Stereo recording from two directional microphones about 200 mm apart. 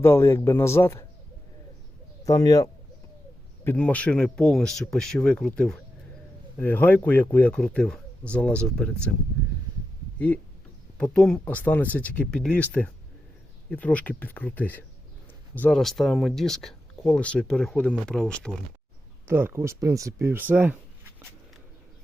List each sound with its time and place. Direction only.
0.0 s speech: 15° left (ahead or behind)
2.2 s speech: 15° left (ahead or behind)
10.2 s speech: 5° left (ahead or behind)
13.7 s speech: 5° left (ahead or behind)
19.3 s speech: 10° right (ahead or behind)